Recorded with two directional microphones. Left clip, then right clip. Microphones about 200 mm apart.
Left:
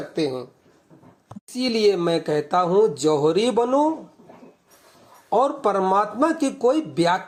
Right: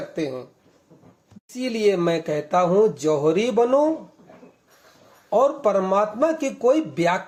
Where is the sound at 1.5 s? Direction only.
25° left (ahead or behind).